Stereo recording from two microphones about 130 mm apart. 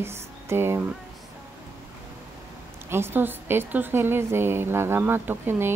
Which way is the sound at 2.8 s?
20° right (ahead or behind).